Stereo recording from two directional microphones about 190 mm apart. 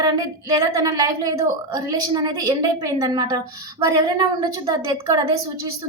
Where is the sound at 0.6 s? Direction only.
20° right (ahead or behind).